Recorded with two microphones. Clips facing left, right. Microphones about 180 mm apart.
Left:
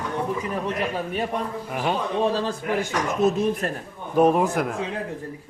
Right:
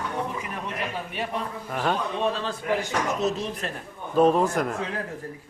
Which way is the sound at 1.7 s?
10° left (ahead or behind).